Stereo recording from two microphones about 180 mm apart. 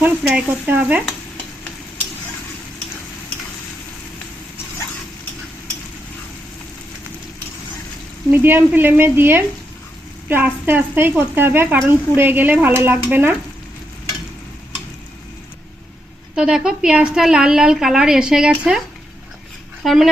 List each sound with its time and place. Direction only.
0.0 s speech: 10° right (ahead or behind)
8.3 s speech: 10° right (ahead or behind)
16.3 s a woman's voice: 5° right (ahead or behind)
19.8 s speech: centre (ahead or behind)